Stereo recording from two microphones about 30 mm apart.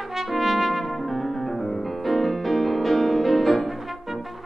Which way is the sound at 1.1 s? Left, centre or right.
Centre.